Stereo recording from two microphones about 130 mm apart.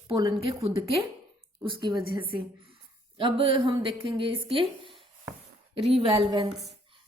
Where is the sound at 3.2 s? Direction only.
40° right (ahead or behind).